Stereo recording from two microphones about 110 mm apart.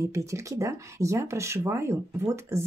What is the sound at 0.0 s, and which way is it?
Speech, 30° right (ahead or behind).